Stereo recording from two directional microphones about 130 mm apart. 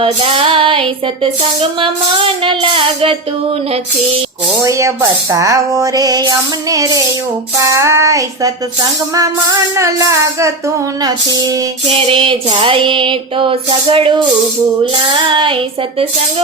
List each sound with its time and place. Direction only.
0.0 s music: 45° right (ahead or behind)
4.6 s music: 25° right (ahead or behind)
11.9 s music: 50° right (ahead or behind)